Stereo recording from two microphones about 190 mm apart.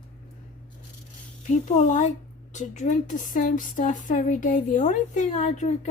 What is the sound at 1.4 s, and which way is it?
Speech, 40° left (ahead or behind).